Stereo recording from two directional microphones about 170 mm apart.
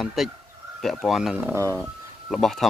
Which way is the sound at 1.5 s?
15° right (ahead or behind).